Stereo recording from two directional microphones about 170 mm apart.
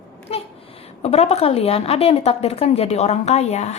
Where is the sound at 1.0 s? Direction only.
40° left (ahead or behind).